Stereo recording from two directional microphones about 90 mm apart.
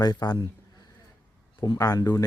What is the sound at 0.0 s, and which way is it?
Speech, 50° left (ahead or behind).